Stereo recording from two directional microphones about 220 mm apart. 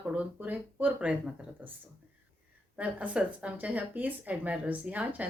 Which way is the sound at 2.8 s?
5° right (ahead or behind).